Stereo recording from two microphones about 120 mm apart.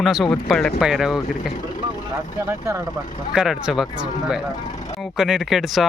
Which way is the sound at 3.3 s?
5° right (ahead or behind).